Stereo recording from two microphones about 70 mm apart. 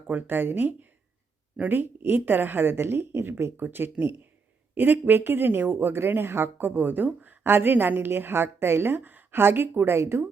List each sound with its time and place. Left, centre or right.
0.1 s speech: right